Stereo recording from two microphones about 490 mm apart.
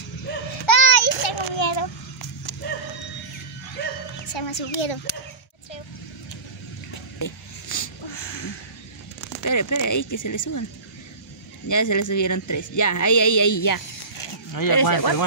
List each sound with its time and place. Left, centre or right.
0.7 s child singing: left
2.6 s horse: centre
4.3 s speech: left
7.2 s a sound: left
8.1 s a sound: left
9.4 s speech: left
11.6 s speech: left